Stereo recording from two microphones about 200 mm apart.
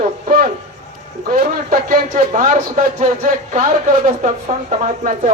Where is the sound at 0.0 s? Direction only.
45° right (ahead or behind).